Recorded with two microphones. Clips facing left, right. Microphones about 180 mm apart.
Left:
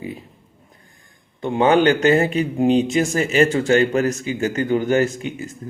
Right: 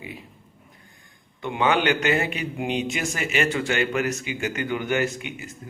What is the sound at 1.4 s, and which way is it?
Speech, 35° left (ahead or behind).